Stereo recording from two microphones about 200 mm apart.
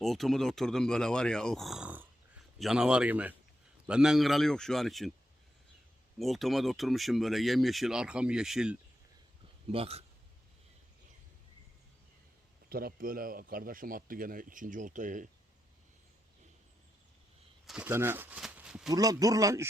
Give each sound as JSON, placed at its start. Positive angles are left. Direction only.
{"t": 0.0, "sound": "speech", "side_deg": 0}
{"t": 6.1, "sound": "speech", "side_deg": 0}
{"t": 9.7, "sound": "speech", "side_deg": -30}
{"t": 12.6, "sound": "speech", "side_deg": -50}
{"t": 17.7, "sound": "speech", "side_deg": -10}
{"t": 18.9, "sound": "speech", "side_deg": -15}